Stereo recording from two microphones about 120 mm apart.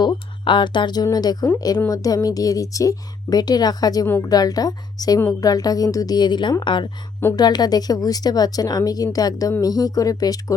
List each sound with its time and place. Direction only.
0.0 s a woman's voice: 40° left (ahead or behind)